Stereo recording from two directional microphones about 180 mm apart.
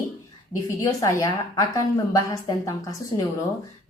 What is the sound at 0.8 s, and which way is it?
A woman's voice, 20° left (ahead or behind).